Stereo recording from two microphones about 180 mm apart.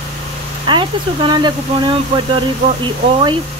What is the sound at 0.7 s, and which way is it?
Speech, 25° right (ahead or behind).